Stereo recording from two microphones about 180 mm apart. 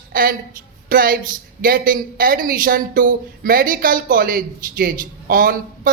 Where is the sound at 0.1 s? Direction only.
55° right (ahead or behind).